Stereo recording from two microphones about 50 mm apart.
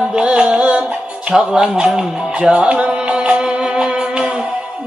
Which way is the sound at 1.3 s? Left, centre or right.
Centre.